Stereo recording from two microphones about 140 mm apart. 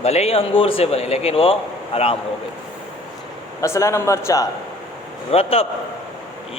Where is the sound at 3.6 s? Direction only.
20° left (ahead or behind).